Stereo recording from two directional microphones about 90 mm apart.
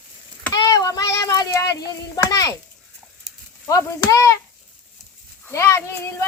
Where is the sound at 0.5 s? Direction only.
45° left (ahead or behind).